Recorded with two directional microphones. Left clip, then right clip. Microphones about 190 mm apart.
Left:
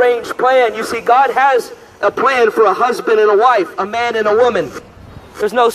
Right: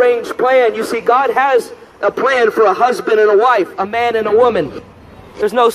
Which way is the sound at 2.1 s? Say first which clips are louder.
Even; 25° left (ahead or behind).